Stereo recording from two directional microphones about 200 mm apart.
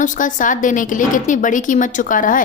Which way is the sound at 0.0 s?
40° left (ahead or behind).